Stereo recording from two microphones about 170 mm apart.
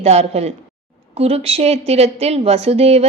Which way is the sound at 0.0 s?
40° right (ahead or behind).